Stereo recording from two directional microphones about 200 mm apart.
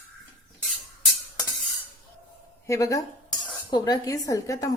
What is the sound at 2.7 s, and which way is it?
A woman's voice, 15° left (ahead or behind).